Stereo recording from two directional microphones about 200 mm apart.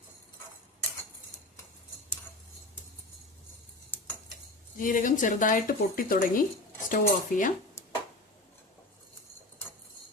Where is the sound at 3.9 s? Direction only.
10° left (ahead or behind).